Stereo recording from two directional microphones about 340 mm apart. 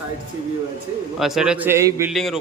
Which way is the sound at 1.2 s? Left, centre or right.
Centre.